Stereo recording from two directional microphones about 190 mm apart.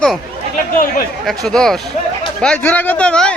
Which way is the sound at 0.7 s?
50° left (ahead or behind).